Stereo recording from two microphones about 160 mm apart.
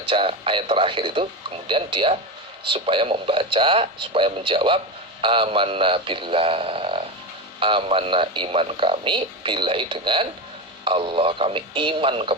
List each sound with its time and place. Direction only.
0.0 s a man's voice: 35° right (ahead or behind)